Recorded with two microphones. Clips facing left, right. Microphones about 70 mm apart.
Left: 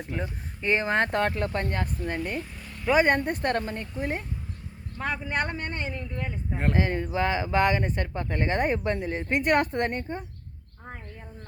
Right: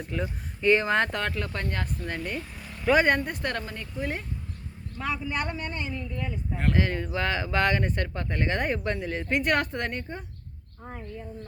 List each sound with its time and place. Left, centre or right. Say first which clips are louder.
0.1 s speech: right 2 dB; left; by 2.5 s centre
2.6 s a sound: right 4 dB; centre
3.1 s speech: left 2 dB; left
4.9 s speech: left 1 dB; left
6.6 s speech: left 1 dB; left